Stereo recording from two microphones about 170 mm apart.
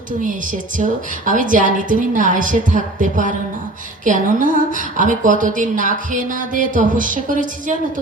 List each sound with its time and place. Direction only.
0.8 s a woman's voice: 50° right (ahead or behind)